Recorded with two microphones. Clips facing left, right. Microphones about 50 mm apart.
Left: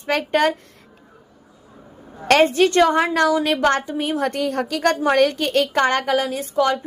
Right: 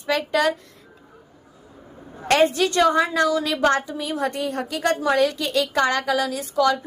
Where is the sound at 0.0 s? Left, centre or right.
Left.